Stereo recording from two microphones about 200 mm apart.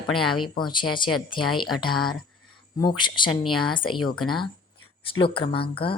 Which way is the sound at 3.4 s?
Centre (ahead or behind).